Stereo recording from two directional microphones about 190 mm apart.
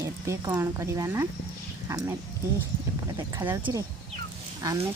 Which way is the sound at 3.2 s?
20° right (ahead or behind).